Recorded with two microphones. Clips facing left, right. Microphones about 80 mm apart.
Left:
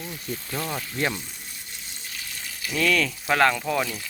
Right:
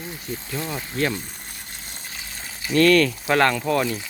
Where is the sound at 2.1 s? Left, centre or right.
Right.